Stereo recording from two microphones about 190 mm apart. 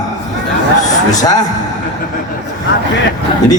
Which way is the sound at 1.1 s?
20° left (ahead or behind).